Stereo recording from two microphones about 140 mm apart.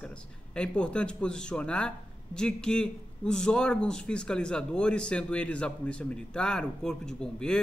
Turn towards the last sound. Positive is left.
turn(degrees=5)  # may be behind; listen again after turning